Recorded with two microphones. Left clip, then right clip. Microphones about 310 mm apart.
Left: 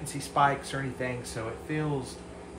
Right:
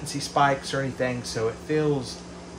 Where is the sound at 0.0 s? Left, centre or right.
Right.